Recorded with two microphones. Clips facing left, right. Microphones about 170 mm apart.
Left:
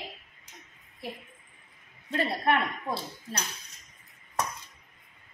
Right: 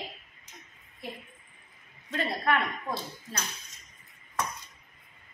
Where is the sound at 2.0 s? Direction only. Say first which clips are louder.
Left 2 dB; 30° left (ahead or behind).